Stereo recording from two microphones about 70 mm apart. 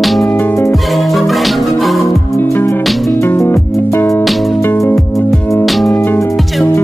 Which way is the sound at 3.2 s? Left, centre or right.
Left.